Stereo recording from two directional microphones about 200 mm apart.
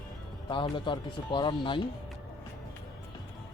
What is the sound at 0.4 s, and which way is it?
Speech, 25° left (ahead or behind).